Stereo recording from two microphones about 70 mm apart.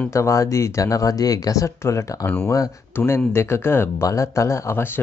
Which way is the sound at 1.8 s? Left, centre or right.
Left.